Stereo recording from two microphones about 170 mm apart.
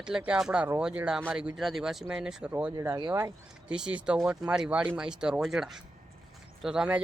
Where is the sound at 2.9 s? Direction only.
25° right (ahead or behind).